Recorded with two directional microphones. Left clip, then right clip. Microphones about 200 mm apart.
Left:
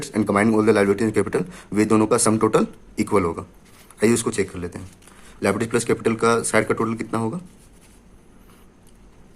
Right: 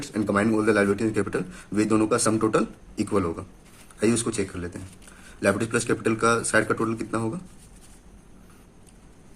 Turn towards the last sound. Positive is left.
turn(degrees=30)  # may be behind; listen again after turning